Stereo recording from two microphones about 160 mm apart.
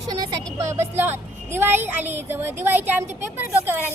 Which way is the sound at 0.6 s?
20° right (ahead or behind).